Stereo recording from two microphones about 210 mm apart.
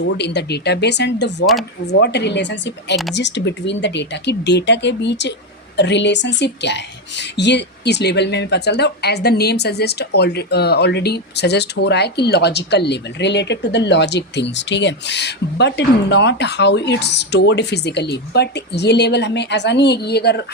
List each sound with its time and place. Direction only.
0.0 s speech: 55° left (ahead or behind)